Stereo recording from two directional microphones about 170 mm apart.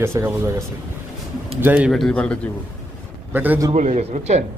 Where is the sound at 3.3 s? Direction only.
10° right (ahead or behind).